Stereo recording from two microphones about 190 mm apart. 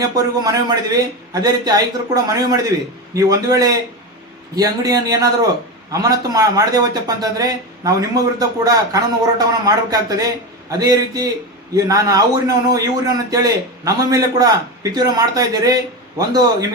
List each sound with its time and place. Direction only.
0.0 s a man's voice: 20° right (ahead or behind)